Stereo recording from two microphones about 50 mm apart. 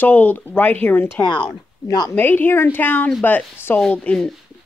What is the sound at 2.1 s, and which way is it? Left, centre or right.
A woman's voice, left.